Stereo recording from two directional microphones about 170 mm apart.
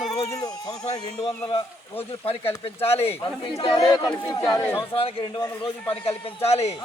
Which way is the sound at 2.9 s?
35° left (ahead or behind).